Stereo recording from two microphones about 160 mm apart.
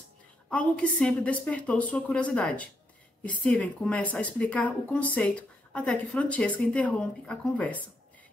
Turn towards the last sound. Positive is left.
turn(degrees=10)  # may be behind; listen again after turning